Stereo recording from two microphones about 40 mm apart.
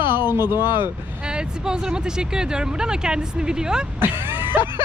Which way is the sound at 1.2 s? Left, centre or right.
Right.